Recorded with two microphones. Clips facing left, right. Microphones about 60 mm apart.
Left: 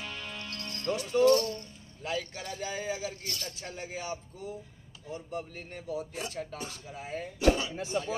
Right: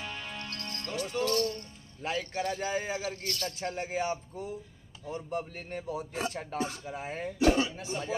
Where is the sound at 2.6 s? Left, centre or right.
Right.